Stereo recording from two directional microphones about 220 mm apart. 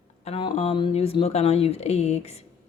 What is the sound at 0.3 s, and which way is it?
Speech, 25° left (ahead or behind).